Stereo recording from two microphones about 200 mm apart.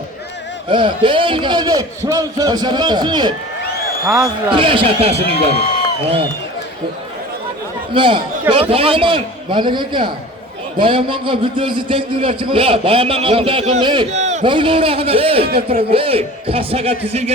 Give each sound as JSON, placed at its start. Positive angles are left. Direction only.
{"t": 0.7, "sound": "a man's voice", "side_deg": -25}
{"t": 4.0, "sound": "a man's voice", "side_deg": -5}
{"t": 4.4, "sound": "a man's voice", "side_deg": -25}
{"t": 7.9, "sound": "a man's voice", "side_deg": -25}